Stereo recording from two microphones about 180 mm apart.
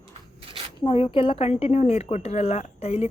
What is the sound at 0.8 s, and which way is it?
Speech, 30° left (ahead or behind).